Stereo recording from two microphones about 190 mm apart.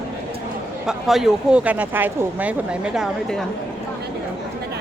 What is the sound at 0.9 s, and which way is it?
Speech, centre (ahead or behind).